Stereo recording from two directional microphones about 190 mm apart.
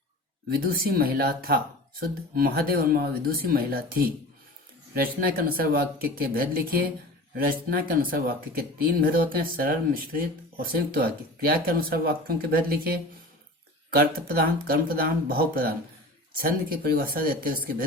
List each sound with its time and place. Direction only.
0.5 s speech: 50° right (ahead or behind)
4.9 s speech: 50° right (ahead or behind)